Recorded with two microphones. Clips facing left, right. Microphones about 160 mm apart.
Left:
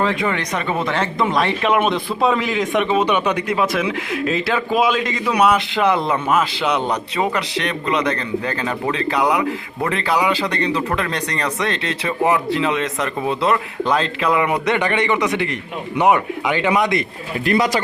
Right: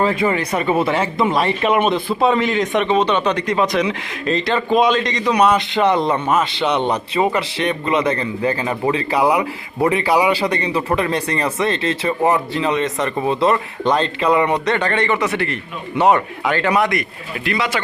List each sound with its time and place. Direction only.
0.0 s a man's voice: 5° right (ahead or behind); by 17.0 s 20° left (ahead or behind)
17.4 s speech: 40° left (ahead or behind)